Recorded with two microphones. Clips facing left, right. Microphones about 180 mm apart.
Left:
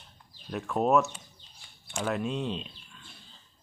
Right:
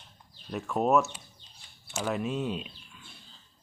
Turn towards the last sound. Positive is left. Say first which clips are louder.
# right 1 dB
turn(degrees=-10)  # may be behind; listen again after turning